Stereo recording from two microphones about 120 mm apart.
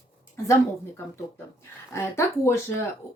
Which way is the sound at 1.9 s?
20° left (ahead or behind).